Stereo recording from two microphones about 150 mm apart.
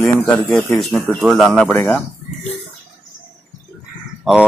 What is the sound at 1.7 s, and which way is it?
Speech, 10° left (ahead or behind).